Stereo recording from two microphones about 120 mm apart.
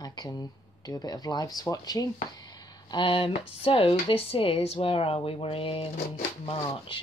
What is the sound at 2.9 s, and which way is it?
Speech, 45° left (ahead or behind).